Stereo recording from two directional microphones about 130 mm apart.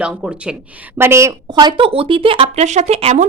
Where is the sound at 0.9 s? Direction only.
20° right (ahead or behind).